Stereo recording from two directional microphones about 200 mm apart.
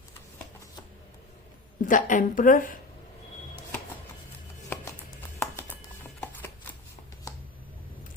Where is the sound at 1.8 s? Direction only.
40° left (ahead or behind).